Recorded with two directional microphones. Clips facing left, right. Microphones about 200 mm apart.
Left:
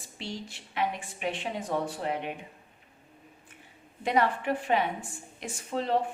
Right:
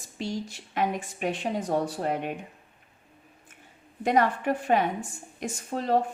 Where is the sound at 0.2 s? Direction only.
45° right (ahead or behind).